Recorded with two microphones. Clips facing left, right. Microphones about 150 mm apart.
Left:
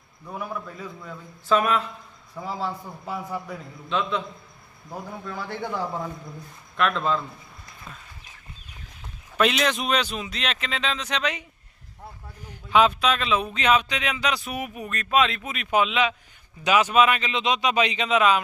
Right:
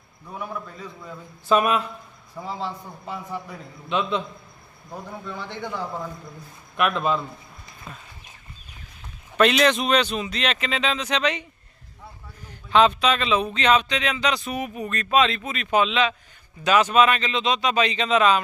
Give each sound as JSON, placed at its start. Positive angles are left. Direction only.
{"t": 0.3, "sound": "speech", "side_deg": 5}
{"t": 1.5, "sound": "speech", "side_deg": -15}
{"t": 2.3, "sound": "speech", "side_deg": 0}
{"t": 3.8, "sound": "speech", "side_deg": -15}
{"t": 5.2, "sound": "speech", "side_deg": 5}
{"t": 6.7, "sound": "speech", "side_deg": -15}
{"t": 9.4, "sound": "speech", "side_deg": 0}
{"t": 12.5, "sound": "speech", "side_deg": 5}